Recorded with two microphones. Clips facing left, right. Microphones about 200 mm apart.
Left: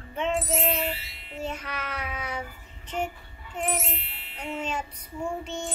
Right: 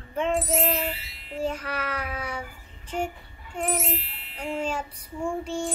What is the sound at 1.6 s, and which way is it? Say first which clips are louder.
Child singing: right 4 dB; 10° right (ahead or behind).